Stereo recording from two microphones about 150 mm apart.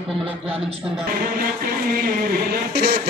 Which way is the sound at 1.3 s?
80° right.